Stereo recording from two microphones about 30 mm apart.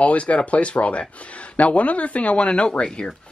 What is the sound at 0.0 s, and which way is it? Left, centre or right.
Speech, left.